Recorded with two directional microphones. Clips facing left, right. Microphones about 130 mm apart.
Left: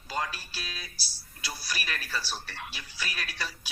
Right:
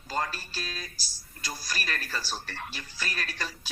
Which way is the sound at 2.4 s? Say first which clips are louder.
Right 2 dB; 15° left (ahead or behind).